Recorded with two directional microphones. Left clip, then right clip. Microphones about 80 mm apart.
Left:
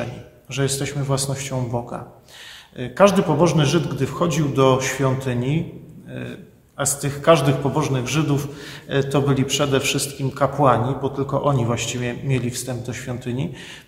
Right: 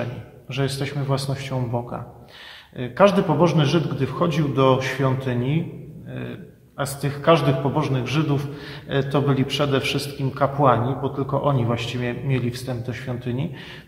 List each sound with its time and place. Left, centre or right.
0.0 s a man's voice: left
6.8 s a man's voice: left